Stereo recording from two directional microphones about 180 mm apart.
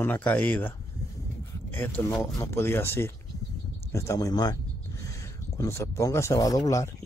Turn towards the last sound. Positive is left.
turn(degrees=20)  # may be behind; listen again after turning